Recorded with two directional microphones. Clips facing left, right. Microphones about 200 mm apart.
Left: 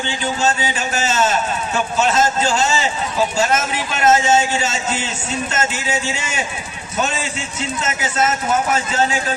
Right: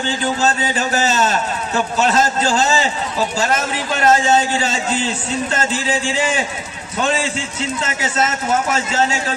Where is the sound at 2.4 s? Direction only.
40° right (ahead or behind).